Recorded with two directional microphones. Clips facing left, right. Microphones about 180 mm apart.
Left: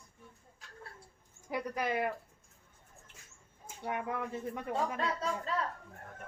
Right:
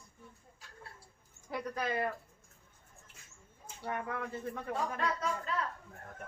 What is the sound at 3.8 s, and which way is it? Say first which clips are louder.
Speech: left 2 dB; 15° left (ahead or behind).